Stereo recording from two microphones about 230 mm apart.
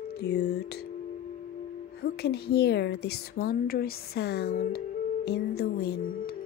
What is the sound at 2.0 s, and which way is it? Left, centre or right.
A woman's voice, left.